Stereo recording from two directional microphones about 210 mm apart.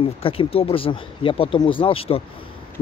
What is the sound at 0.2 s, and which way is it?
A man's voice, 25° left (ahead or behind).